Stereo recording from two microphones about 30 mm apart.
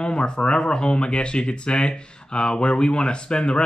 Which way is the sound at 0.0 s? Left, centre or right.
Left.